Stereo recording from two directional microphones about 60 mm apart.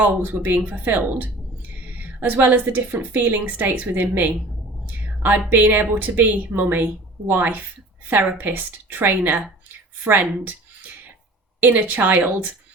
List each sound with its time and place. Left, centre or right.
0.0 s a woman's voice: right
11.6 s speech: right